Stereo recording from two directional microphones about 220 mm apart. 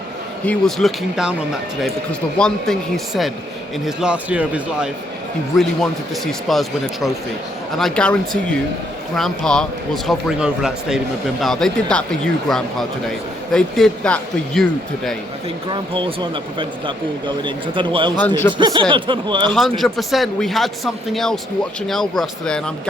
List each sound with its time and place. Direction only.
0.4 s speech: centre (ahead or behind)
2.4 s speech: centre (ahead or behind)
6.5 s speech: centre (ahead or behind)
15.7 s speech: 25° right (ahead or behind)
19.5 s speech: centre (ahead or behind)